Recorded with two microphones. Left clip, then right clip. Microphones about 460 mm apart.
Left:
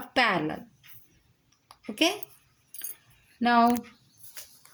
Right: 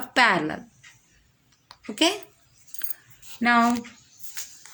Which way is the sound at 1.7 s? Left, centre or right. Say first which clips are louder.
Right 3 dB; left.